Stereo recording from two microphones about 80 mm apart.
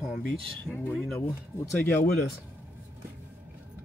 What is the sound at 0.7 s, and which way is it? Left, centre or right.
Speech, centre.